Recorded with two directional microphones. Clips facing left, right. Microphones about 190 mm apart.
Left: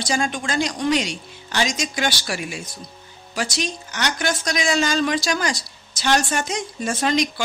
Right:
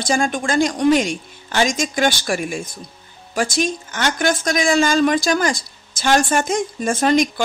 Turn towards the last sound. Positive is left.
turn(degrees=-50)  # may be behind; listen again after turning